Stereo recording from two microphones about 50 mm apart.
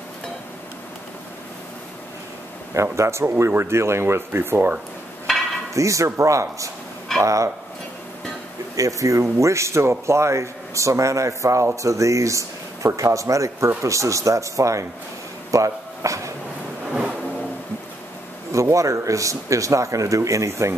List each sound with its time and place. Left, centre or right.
2.7 s speech: right
5.3 s a sound: centre
5.8 s speech: right
8.7 s speech: right
15.5 s a sound: right
18.5 s speech: right